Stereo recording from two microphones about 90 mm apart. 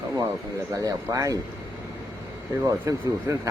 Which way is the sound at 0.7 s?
35° right (ahead or behind).